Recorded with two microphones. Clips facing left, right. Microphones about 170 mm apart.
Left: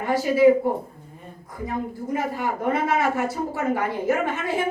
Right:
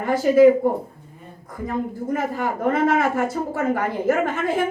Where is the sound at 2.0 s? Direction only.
50° right (ahead or behind).